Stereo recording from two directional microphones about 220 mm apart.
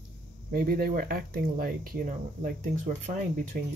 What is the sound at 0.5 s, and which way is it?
Speech, 45° right (ahead or behind).